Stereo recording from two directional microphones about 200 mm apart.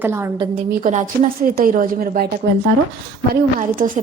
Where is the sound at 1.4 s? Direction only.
40° right (ahead or behind).